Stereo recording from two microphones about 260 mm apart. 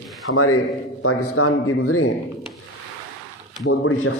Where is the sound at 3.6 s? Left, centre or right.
Left.